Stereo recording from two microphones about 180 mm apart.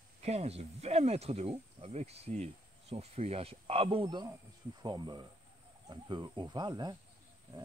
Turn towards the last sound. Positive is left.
turn(degrees=-25)  # may be behind; listen again after turning